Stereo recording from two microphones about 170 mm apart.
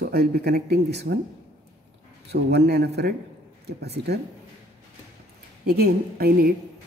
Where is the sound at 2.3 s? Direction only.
70° right (ahead or behind).